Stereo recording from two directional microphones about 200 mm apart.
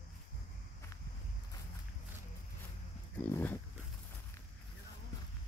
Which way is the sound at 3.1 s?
10° left (ahead or behind).